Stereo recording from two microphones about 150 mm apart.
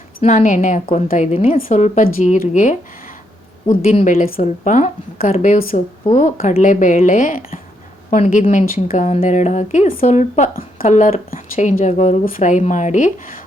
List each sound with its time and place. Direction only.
0.2 s a woman's voice: 55° left (ahead or behind)
3.7 s a woman's voice: 65° left (ahead or behind)
3.9 s a woman's voice: 45° left (ahead or behind)
10.5 s a woman's voice: 75° left (ahead or behind)
10.9 s speech: 50° left (ahead or behind)
12.2 s a woman's voice: 60° left (ahead or behind)